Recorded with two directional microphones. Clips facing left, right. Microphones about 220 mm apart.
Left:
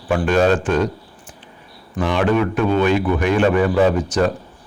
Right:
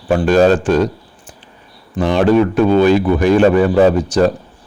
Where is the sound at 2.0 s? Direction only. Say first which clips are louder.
Right 5 dB; 35° right (ahead or behind).